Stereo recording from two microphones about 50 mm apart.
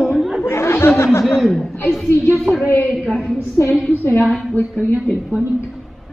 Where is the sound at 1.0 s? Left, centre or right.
Left.